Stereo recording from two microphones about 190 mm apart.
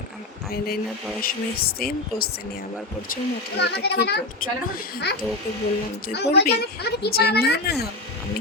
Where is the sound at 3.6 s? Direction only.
60° left (ahead or behind).